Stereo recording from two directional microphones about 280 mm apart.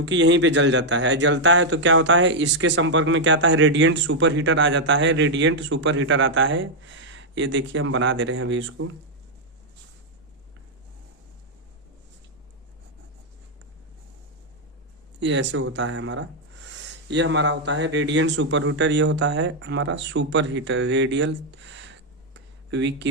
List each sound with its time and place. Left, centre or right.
0.0 s speech: right
15.2 s speech: right